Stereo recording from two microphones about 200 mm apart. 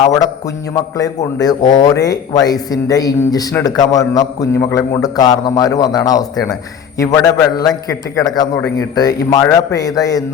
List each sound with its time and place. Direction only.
0.0 s a man's voice: 20° left (ahead or behind)